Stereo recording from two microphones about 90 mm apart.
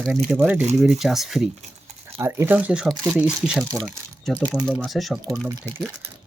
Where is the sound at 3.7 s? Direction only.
10° left (ahead or behind).